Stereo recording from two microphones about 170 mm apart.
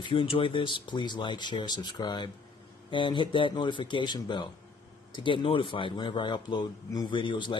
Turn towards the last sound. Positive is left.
turn(degrees=30)  # may be behind; listen again after turning